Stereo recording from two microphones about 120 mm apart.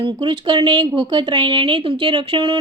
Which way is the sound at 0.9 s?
40° right (ahead or behind).